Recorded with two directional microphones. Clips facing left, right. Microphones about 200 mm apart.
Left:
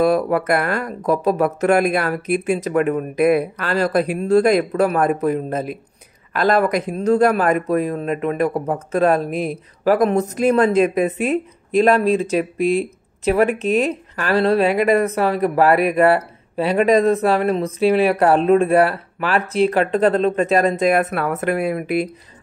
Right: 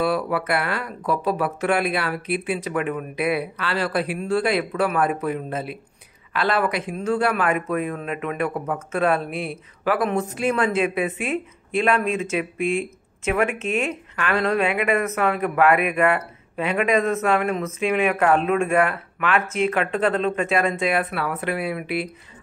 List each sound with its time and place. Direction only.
0.0 s speech: 45° left (ahead or behind)